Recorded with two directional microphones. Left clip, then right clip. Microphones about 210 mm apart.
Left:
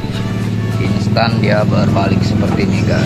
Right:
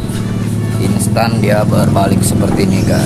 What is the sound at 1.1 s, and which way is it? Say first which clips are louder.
Speech: right 1 dB; 40° right (ahead or behind).